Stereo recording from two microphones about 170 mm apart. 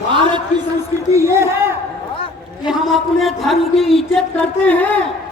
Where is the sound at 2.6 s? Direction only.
Centre (ahead or behind).